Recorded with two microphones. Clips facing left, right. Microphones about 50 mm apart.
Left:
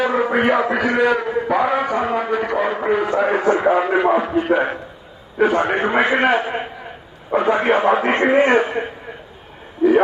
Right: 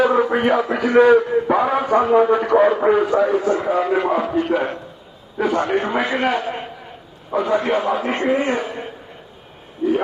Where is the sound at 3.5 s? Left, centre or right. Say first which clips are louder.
Left 4 dB; left.